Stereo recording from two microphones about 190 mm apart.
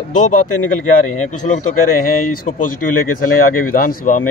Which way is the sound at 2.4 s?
45° left (ahead or behind).